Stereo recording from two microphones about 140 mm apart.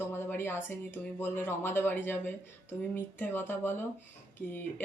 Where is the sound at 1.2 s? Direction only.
15° left (ahead or behind).